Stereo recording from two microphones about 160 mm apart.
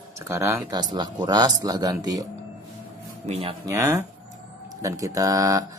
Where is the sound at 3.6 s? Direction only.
20° right (ahead or behind).